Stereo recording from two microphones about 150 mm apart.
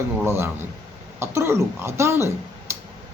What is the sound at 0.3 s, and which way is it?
Speech, 15° right (ahead or behind).